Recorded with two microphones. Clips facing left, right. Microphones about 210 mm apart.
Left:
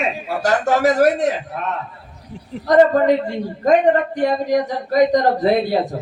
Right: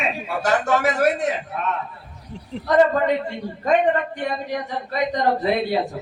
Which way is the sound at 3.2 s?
40° left (ahead or behind).